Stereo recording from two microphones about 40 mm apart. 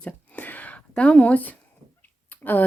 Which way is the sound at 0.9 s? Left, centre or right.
Left.